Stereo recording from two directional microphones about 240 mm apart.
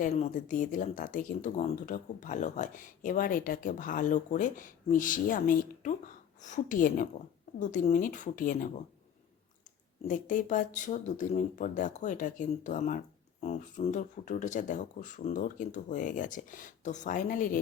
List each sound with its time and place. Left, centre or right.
0.0 s speech: left
10.1 s speech: left